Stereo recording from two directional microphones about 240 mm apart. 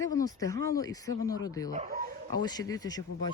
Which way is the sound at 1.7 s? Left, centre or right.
Right.